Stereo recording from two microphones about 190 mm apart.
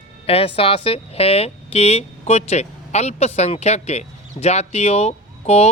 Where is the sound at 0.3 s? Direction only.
30° left (ahead or behind).